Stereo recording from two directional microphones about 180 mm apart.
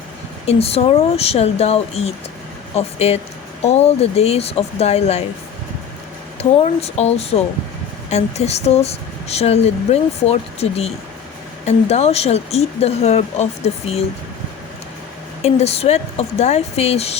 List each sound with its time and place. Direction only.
0.4 s speech: 35° left (ahead or behind)
6.4 s speech: 35° left (ahead or behind)
15.4 s speech: 35° left (ahead or behind)